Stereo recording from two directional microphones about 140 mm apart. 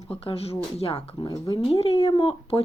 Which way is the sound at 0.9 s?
30° left (ahead or behind).